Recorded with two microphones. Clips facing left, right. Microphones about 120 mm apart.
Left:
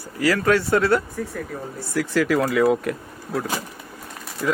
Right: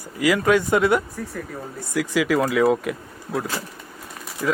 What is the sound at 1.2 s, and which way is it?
Speech, centre (ahead or behind).